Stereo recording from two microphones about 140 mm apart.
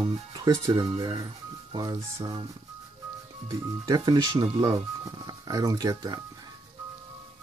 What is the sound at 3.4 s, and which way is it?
Speech, 25° right (ahead or behind).